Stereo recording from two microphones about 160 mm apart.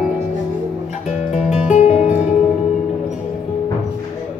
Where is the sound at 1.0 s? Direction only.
45° left (ahead or behind).